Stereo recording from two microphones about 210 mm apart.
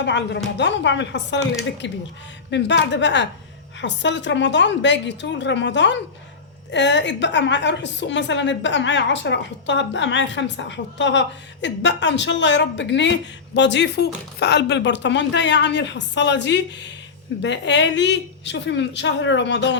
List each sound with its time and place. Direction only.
0.0 s a woman's voice: 55° left (ahead or behind)